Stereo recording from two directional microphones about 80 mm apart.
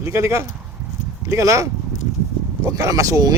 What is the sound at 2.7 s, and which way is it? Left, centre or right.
Speech, right.